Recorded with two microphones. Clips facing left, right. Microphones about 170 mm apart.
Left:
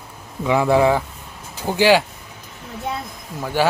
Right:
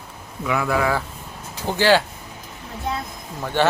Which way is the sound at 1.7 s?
15° left (ahead or behind).